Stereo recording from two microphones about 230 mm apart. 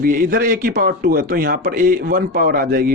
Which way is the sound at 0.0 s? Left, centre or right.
Right.